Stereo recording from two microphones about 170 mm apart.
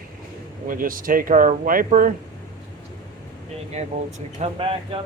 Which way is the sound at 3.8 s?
40° right (ahead or behind).